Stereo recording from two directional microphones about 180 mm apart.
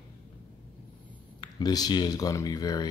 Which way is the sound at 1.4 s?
20° left (ahead or behind).